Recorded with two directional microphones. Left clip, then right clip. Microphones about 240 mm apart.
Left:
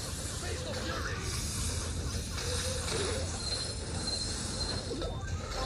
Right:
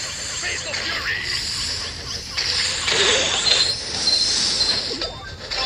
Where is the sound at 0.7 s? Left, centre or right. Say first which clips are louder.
Right 14 dB; right.